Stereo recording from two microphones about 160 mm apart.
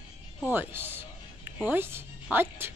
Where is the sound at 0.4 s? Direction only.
15° right (ahead or behind).